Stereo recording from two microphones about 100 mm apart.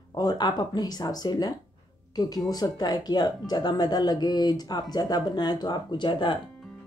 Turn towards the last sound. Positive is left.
turn(degrees=55)  # may be behind; listen again after turning